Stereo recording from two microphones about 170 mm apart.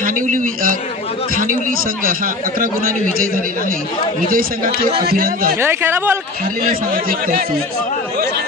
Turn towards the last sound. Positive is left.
turn(degrees=-60)  # may be behind; listen again after turning